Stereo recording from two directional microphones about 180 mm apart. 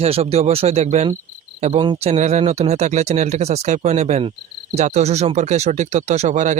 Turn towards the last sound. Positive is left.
turn(degrees=-40)  # may be behind; listen again after turning